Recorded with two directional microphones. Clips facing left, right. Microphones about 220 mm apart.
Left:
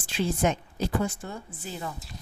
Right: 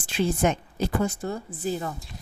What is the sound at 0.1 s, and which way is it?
A woman's voice, 55° right (ahead or behind).